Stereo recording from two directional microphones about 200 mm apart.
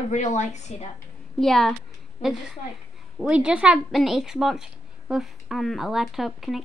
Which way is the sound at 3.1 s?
5° right (ahead or behind).